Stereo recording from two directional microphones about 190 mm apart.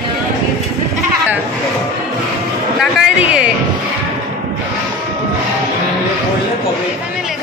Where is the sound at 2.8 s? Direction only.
5° right (ahead or behind).